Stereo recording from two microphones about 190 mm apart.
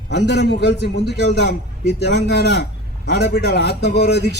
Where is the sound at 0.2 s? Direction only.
65° left (ahead or behind).